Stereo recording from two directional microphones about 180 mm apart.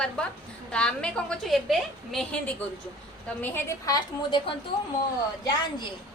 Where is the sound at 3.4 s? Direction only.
15° left (ahead or behind).